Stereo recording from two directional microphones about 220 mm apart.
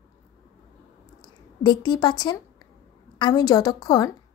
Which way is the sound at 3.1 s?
20° left (ahead or behind).